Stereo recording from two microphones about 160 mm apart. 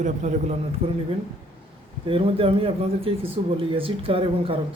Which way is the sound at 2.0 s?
35° right (ahead or behind).